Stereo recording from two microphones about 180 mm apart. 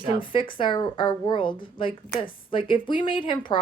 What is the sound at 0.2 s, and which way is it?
Speech, 30° left (ahead or behind).